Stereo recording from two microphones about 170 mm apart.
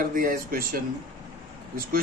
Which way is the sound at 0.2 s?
55° right (ahead or behind).